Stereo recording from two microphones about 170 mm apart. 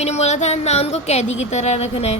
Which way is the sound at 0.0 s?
40° left (ahead or behind).